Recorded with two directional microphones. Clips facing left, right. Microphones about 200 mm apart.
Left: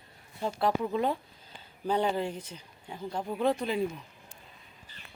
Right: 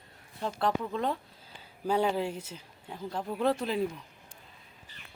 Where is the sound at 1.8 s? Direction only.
5° right (ahead or behind).